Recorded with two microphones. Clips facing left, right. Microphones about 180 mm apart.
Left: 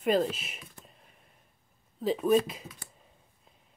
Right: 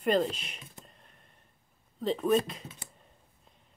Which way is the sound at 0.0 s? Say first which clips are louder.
Left 1 dB; 5° left (ahead or behind).